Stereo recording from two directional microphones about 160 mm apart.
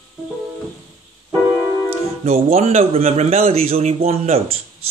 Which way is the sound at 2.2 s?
40° right (ahead or behind).